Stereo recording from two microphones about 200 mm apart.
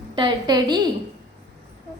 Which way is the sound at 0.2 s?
20° right (ahead or behind).